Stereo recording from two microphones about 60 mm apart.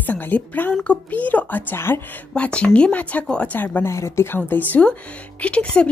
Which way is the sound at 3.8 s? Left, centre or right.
Left.